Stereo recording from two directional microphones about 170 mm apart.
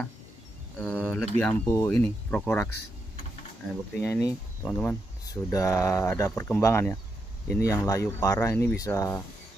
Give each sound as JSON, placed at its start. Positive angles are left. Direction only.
{"t": 0.7, "sound": "speech", "side_deg": 5}
{"t": 1.7, "sound": "speech", "side_deg": 20}
{"t": 4.0, "sound": "speech", "side_deg": 15}